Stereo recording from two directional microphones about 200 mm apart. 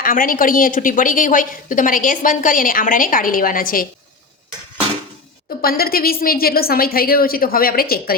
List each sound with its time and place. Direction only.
0.0 s a woman's voice: 45° left (ahead or behind)
5.6 s a woman's voice: 50° left (ahead or behind)